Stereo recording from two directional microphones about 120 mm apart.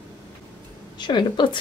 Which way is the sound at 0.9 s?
40° left (ahead or behind).